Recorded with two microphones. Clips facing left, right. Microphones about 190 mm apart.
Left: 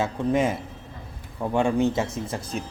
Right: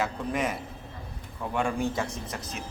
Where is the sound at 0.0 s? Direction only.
25° left (ahead or behind).